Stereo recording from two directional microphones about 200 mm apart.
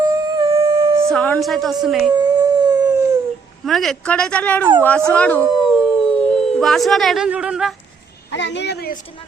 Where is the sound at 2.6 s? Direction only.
20° right (ahead or behind).